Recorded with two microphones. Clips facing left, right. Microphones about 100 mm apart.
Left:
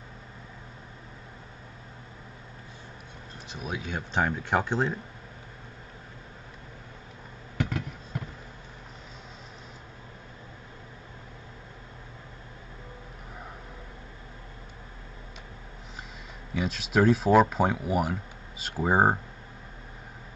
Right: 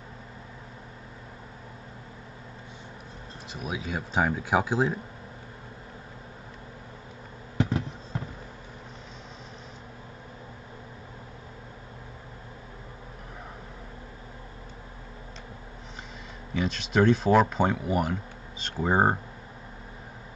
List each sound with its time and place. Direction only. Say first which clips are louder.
3.5 s speech: right 1 dB; centre (ahead or behind)
7.5 s a sound: right 4 dB; 30° right (ahead or behind)
16.5 s speech: right 1 dB; 5° left (ahead or behind)